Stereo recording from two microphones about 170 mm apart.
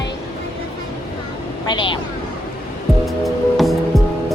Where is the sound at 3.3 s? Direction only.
Centre (ahead or behind).